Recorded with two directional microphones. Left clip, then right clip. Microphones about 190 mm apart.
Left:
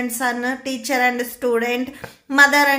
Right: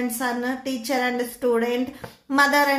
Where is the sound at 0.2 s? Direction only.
20° left (ahead or behind).